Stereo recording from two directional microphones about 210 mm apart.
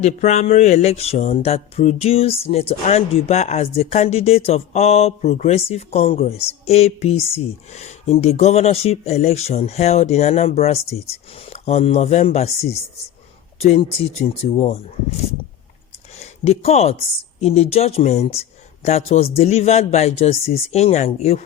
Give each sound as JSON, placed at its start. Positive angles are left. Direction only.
{"t": 0.0, "sound": "a man's voice", "side_deg": 30}
{"t": 16.2, "sound": "a man's voice", "side_deg": 30}